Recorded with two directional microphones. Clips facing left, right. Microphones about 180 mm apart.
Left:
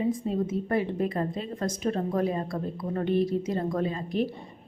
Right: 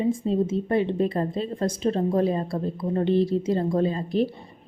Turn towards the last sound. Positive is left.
turn(degrees=-30)  # may be behind; listen again after turning